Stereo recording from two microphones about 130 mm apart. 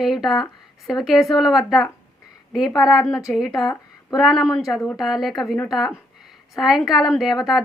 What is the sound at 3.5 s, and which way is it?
Speech, 30° left (ahead or behind).